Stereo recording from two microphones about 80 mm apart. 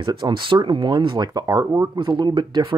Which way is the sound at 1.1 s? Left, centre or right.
Right.